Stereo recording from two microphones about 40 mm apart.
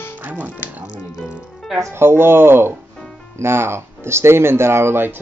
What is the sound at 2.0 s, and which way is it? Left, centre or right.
Speech, right.